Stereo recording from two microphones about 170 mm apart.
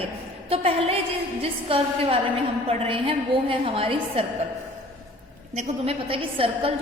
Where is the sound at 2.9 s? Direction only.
30° right (ahead or behind).